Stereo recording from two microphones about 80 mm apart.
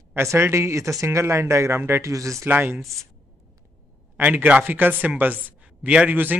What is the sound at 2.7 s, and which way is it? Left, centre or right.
Speech, centre.